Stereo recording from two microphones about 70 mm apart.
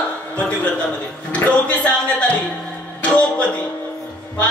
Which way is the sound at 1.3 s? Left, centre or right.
Centre.